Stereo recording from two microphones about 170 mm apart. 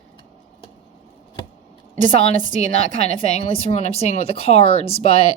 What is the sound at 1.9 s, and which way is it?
Speech, 45° right (ahead or behind).